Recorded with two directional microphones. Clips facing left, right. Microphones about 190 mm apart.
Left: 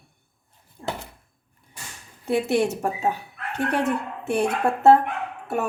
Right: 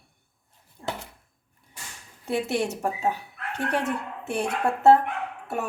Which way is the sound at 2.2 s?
55° left (ahead or behind).